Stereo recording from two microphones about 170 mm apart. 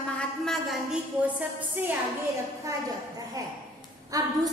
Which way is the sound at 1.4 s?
10° right (ahead or behind).